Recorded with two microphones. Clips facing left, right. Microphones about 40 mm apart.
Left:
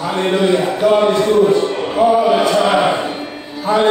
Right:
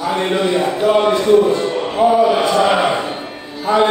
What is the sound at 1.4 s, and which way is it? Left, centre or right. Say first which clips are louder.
Speech: left 2 dB; centre.